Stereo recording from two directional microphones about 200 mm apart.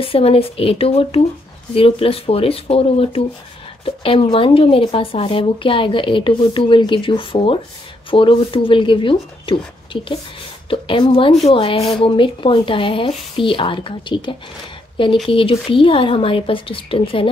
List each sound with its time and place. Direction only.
0.0 s speech: 30° left (ahead or behind)
10.7 s speech: 25° left (ahead or behind)